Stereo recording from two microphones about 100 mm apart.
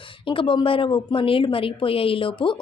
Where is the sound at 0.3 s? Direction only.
55° left (ahead or behind).